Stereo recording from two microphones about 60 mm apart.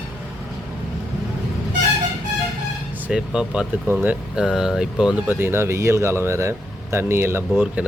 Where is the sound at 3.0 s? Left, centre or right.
Centre.